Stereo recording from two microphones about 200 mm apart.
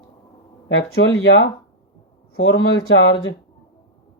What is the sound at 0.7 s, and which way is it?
Speech, 80° left.